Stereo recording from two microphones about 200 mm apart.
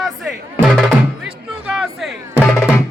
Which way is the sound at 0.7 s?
Centre (ahead or behind).